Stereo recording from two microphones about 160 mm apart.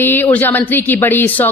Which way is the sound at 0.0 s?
15° left (ahead or behind).